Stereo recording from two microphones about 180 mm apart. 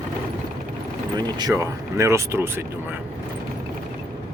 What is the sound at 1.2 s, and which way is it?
Speech, 20° right (ahead or behind).